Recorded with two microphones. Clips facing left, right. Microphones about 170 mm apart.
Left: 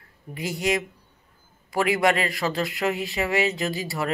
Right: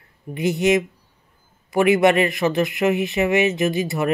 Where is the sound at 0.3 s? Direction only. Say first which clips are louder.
Right 7 dB; 20° right (ahead or behind).